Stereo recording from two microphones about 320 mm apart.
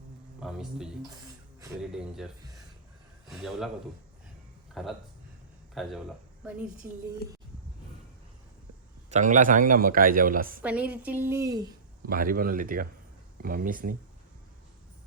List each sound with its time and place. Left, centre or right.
0.3 s a woman's voice: centre
4.7 s speech: centre
9.0 s a man's voice: right
10.6 s a woman's voice: centre
12.0 s a man's voice: right